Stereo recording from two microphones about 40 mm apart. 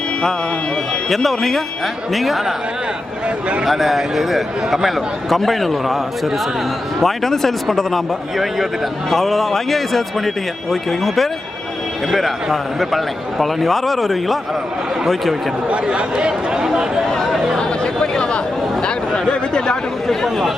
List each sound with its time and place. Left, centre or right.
1.1 s a man's voice: centre
3.7 s a man's voice: centre
15.7 s speech: right
17.3 s chatter: centre
17.6 s chatter: centre
19.3 s speech: left
20.1 s a man's voice: centre